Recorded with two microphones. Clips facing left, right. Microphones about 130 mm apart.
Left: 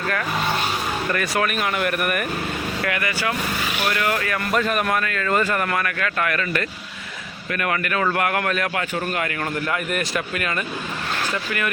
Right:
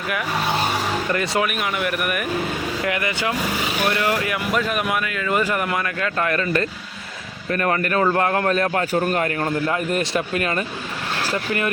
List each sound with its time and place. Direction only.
1.1 s speech: 25° right (ahead or behind)
1.4 s speech: 5° right (ahead or behind)
2.8 s speech: 20° right (ahead or behind)
4.5 s a man's voice: 5° right (ahead or behind); by 11.7 s 25° right (ahead or behind)